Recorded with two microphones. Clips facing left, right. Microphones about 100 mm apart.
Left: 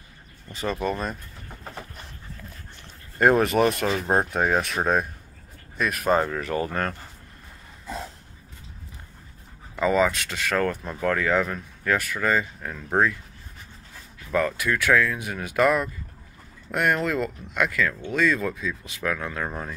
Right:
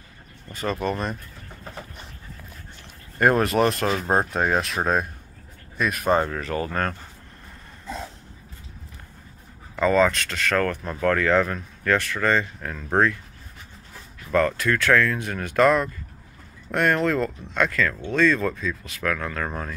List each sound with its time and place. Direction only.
3.2 s speech: 5° left (ahead or behind)
6.4 s speech: 20° left (ahead or behind)
6.7 s speech: 5° left (ahead or behind)
9.8 s speech: 10° left (ahead or behind)
14.3 s speech: 10° left (ahead or behind)